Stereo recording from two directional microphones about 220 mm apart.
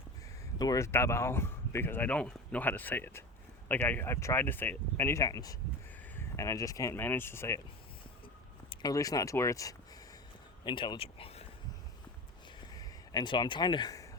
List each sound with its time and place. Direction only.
0.6 s speech: 15° left (ahead or behind)
8.7 s speech: 15° left (ahead or behind)
12.7 s a sound: 15° left (ahead or behind)